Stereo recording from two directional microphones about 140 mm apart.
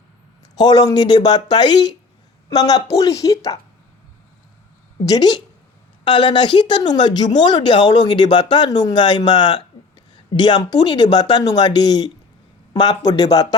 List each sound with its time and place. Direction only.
0.5 s speech: 30° left (ahead or behind)
5.0 s speech: 30° left (ahead or behind)